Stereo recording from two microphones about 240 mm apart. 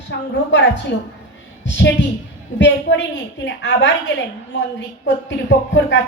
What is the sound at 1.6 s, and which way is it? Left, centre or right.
A woman's voice, left.